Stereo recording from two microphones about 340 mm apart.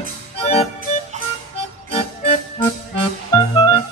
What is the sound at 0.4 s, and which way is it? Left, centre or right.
Music, centre.